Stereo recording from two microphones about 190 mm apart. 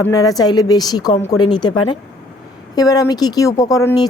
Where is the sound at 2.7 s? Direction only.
20° left (ahead or behind).